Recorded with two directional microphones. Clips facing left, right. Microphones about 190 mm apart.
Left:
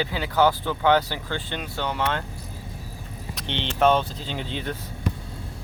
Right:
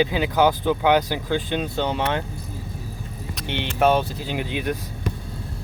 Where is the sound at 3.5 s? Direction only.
10° right (ahead or behind).